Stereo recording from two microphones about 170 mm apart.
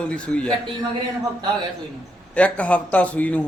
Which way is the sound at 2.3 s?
5° left (ahead or behind).